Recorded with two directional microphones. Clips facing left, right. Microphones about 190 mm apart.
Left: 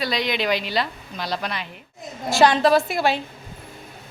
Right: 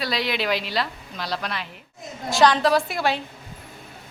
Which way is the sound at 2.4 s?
15° left (ahead or behind).